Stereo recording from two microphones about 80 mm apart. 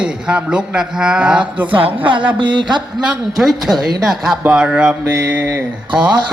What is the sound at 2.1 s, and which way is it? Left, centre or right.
A man's voice, right.